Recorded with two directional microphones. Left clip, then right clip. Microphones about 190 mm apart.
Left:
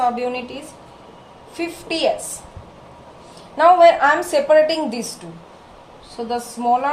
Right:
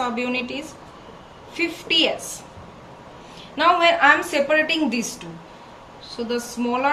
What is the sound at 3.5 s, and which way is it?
A woman's voice, 40° left (ahead or behind).